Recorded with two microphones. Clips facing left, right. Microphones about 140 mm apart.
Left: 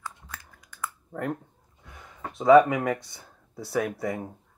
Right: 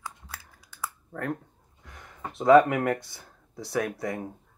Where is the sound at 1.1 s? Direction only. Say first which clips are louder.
Left 1 dB; 5° left (ahead or behind).